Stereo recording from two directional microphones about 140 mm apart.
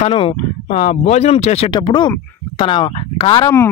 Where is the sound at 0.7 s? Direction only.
60° left (ahead or behind).